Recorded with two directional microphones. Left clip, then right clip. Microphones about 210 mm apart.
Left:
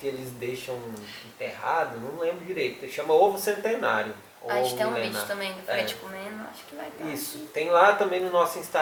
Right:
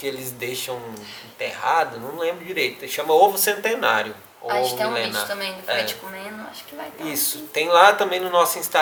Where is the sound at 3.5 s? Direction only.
10° left (ahead or behind).